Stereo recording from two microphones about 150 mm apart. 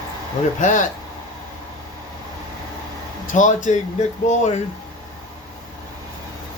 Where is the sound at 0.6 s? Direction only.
60° left (ahead or behind).